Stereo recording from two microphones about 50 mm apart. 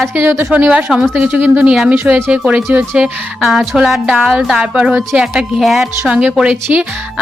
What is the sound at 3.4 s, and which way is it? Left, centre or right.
A woman's voice, centre.